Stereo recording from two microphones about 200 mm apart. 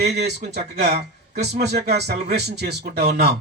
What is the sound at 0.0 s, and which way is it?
Speech, 55° right (ahead or behind).